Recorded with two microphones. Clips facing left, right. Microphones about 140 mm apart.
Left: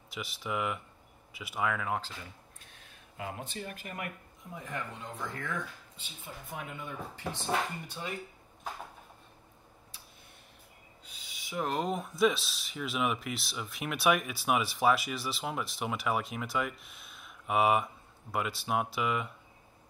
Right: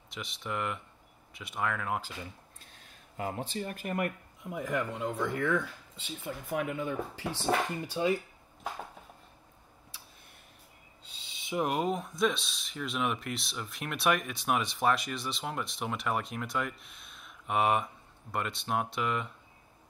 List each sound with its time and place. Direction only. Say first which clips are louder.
0.1 s speech: left 1 dB; 5° left (ahead or behind)
2.6 s speech: even; 35° right (ahead or behind); by 4.1 s 50° right (ahead or behind)
4.5 s speech: right 7 dB; 80° right
7.8 s speech: right 11 dB; 90° right
11.1 s owl: right 7 dB; 25° right (ahead or behind)
11.8 s speech: left 1 dB; centre (ahead or behind)